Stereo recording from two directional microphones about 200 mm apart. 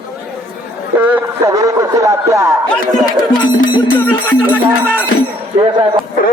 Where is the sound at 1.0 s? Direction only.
10° right (ahead or behind).